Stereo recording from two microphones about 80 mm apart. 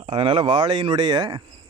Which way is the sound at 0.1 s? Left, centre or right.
Right.